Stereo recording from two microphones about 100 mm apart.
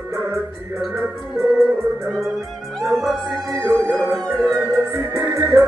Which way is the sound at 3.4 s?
30° right (ahead or behind).